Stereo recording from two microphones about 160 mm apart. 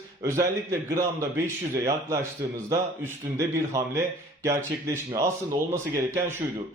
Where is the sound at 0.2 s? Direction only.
15° right (ahead or behind).